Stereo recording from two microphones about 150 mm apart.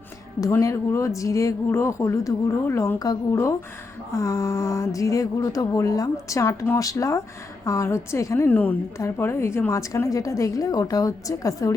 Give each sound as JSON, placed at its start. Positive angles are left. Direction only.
{"t": 0.4, "sound": "a woman's voice", "side_deg": 20}